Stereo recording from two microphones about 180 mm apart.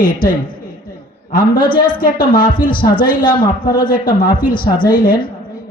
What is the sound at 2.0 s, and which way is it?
A woman's voice, 50° left (ahead or behind).